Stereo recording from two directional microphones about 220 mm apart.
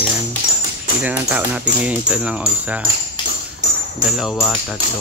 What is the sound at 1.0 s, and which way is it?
Speech, 5° right (ahead or behind).